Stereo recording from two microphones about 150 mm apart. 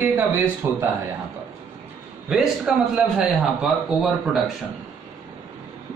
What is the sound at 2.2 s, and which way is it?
A man's voice, 5° right (ahead or behind).